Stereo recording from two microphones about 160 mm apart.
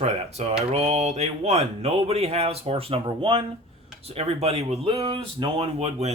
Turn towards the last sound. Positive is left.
turn(degrees=-40)  # may be behind; listen again after turning